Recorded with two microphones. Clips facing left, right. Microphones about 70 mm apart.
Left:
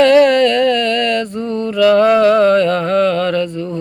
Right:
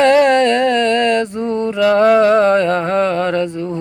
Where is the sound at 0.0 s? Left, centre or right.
Right.